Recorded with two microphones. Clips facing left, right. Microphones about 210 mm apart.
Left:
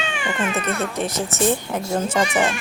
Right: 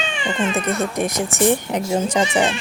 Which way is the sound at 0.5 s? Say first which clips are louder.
Right 3 dB; 15° right (ahead or behind).